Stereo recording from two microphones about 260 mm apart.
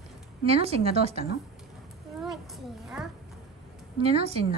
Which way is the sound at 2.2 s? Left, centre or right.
Centre.